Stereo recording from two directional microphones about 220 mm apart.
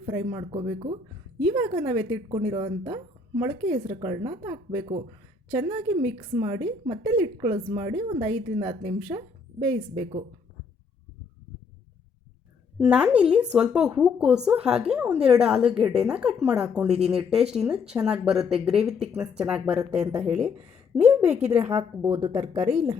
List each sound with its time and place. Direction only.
0.0 s speech: 25° right (ahead or behind)
12.8 s a woman's voice: 5° right (ahead or behind)
21.8 s speech: 20° right (ahead or behind)